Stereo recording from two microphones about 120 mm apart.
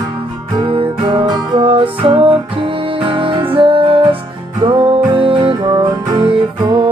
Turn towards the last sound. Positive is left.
turn(degrees=-40)  # may be behind; listen again after turning